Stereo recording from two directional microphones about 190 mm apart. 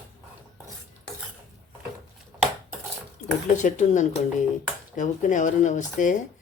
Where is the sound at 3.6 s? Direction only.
40° left (ahead or behind).